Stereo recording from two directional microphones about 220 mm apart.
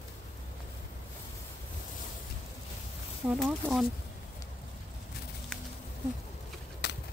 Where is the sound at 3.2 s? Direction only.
5° right (ahead or behind).